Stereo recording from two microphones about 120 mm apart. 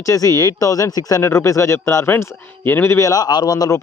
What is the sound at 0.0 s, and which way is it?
Speech, 25° left (ahead or behind).